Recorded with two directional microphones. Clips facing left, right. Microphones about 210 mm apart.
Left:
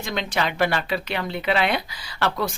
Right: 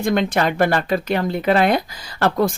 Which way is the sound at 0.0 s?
50° right (ahead or behind).